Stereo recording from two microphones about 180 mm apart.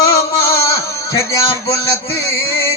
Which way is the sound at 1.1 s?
15° left (ahead or behind).